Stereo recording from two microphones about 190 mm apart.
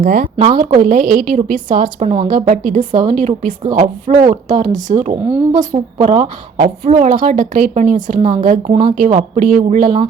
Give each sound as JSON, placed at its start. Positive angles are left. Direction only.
{"t": 0.0, "sound": "a woman's voice", "side_deg": -45}
{"t": 9.1, "sound": "a woman's voice", "side_deg": -45}